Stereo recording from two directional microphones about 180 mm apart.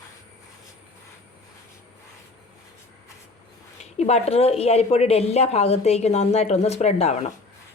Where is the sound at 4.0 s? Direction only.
35° left (ahead or behind).